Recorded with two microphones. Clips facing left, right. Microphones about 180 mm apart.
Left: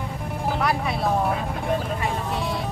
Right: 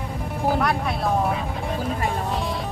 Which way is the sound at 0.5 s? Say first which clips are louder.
Right 1 dB; centre (ahead or behind).